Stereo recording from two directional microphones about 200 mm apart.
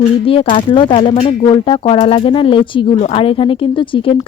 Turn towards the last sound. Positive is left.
turn(degrees=25)  # may be behind; listen again after turning